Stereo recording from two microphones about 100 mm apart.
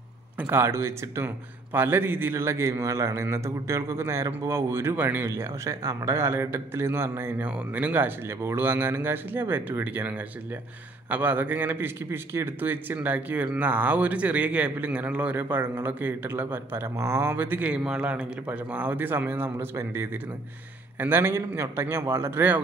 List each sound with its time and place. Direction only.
0.4 s a man's voice: 25° right (ahead or behind)